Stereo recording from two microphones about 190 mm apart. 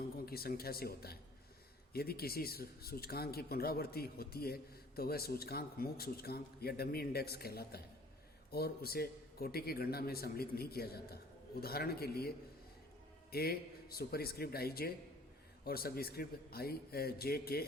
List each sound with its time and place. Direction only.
0.3 s speech: 55° left (ahead or behind)
13.3 s speech: 55° left (ahead or behind)